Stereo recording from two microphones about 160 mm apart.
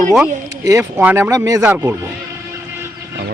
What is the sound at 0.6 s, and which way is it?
Speech, 20° right (ahead or behind).